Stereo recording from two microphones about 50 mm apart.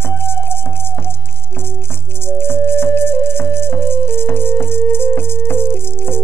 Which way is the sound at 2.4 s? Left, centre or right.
Left.